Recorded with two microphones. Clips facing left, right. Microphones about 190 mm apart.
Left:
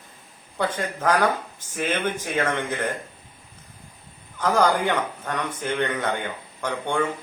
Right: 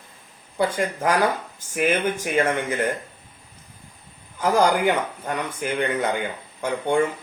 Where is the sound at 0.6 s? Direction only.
10° right (ahead or behind).